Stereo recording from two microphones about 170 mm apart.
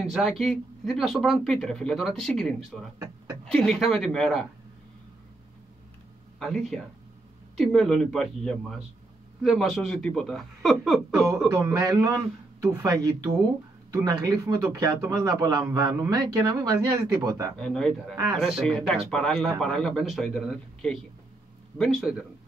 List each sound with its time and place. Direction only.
0.1 s speech: centre (ahead or behind)
6.4 s speech: centre (ahead or behind)
11.2 s a man's voice: 20° right (ahead or behind)
17.6 s speech: 5° left (ahead or behind)